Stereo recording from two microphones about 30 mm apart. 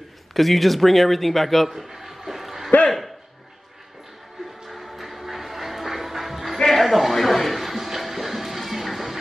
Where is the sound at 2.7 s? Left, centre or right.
Left.